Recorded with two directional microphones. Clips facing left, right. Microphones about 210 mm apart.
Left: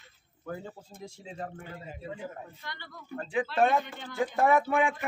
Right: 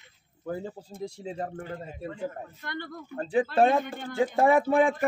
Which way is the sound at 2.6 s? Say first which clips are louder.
Right 9 dB; 50° right (ahead or behind).